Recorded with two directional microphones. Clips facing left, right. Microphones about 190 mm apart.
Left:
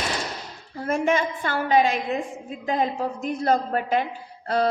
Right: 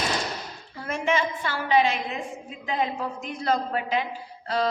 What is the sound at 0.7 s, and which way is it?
A woman's voice, 45° left (ahead or behind).